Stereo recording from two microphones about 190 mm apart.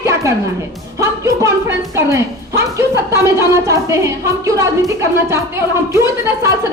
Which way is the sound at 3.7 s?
15° right (ahead or behind).